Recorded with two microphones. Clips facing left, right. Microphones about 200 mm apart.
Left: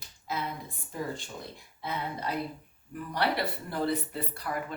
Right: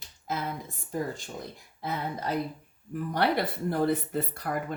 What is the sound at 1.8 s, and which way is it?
Speech, 45° right (ahead or behind).